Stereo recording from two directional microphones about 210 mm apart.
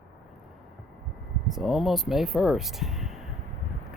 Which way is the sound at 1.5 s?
Centre (ahead or behind).